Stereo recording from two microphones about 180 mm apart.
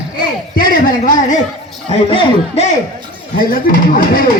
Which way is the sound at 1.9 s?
30° left (ahead or behind).